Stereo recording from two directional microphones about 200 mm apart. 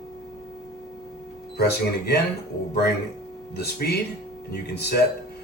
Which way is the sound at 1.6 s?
55° left (ahead or behind).